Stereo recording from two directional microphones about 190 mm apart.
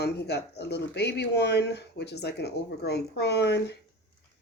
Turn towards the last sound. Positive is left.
turn(degrees=60)  # may be behind; listen again after turning